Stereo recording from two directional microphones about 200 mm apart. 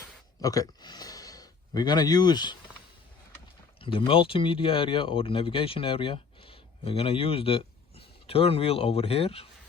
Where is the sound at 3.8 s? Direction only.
25° left (ahead or behind).